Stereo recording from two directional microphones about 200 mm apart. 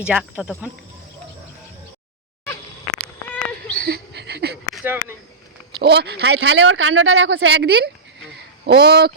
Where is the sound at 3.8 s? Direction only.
50° right (ahead or behind).